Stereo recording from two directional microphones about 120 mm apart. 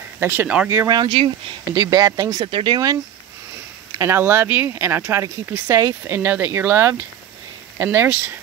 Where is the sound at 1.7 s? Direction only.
30° right (ahead or behind).